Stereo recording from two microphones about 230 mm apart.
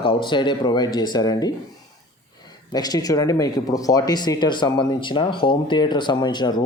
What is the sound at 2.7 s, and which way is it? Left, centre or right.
Speech, centre.